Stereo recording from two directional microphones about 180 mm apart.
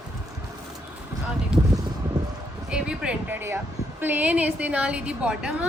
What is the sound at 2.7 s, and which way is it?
A woman's voice, 5° right (ahead or behind).